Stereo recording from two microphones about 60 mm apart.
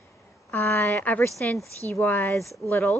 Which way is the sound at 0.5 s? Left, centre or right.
Left.